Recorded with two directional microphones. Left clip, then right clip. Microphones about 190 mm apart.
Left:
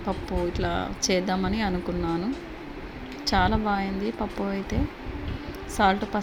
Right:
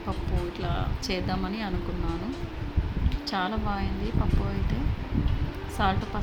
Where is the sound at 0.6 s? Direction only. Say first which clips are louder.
Left 5 dB; 20° left (ahead or behind).